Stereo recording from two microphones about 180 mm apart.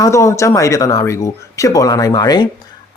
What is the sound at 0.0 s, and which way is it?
A woman's voice, 15° left (ahead or behind).